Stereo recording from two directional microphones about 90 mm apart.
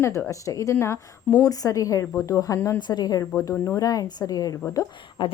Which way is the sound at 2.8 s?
50° left (ahead or behind).